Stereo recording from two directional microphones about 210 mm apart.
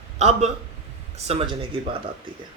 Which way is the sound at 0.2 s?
30° right (ahead or behind).